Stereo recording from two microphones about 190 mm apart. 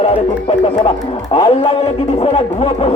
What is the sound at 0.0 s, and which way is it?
Speech, 30° left (ahead or behind).